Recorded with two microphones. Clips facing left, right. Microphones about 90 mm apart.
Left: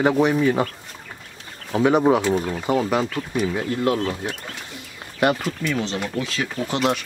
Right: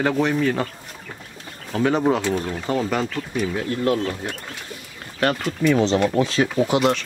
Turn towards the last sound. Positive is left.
turn(degrees=-30)  # may be behind; listen again after turning